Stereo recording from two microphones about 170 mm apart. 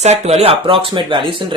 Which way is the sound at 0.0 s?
40° right (ahead or behind).